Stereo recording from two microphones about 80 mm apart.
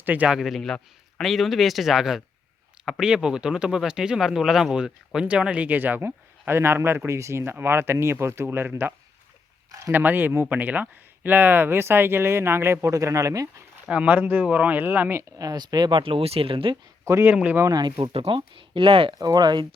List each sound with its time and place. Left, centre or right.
0.0 s speech: right
0.3 s speech: centre; by 13.7 s right
13.8 s speech: centre
15.4 s speech: right
16.7 s speech: right
17.3 s speech: centre
17.7 s speech: right
18.0 s speech: right
19.2 s speech: right